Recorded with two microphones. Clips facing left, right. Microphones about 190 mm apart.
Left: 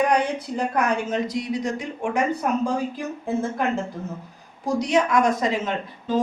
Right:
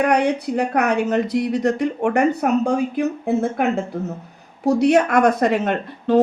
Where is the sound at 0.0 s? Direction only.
65° right (ahead or behind).